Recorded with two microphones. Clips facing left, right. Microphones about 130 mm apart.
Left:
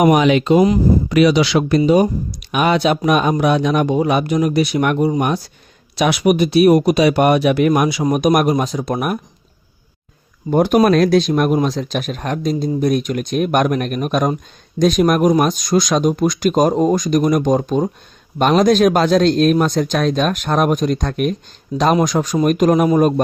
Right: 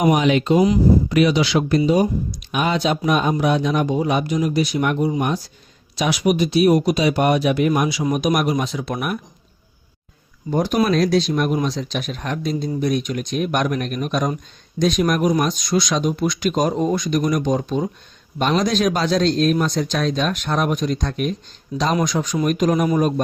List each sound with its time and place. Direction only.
0.0 s speech: 90° left; by 9.2 s 45° left (ahead or behind)
10.5 s speech: 55° left (ahead or behind)
18.3 s speech: 55° left (ahead or behind)